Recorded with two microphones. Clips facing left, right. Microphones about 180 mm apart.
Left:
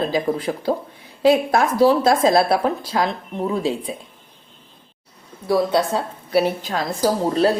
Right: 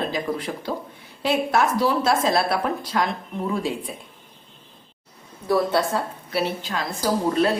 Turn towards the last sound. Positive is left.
turn(degrees=35)  # may be behind; listen again after turning